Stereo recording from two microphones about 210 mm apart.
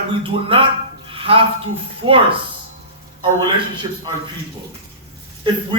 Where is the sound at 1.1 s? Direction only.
25° right (ahead or behind).